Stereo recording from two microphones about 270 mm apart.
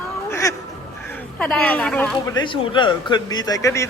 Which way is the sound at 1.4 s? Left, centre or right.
Centre.